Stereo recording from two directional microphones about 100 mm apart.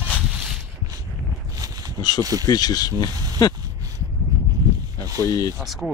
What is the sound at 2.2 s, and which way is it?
Speech, 40° right (ahead or behind).